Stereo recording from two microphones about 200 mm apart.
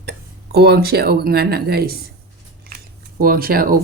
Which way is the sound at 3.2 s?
50° right (ahead or behind).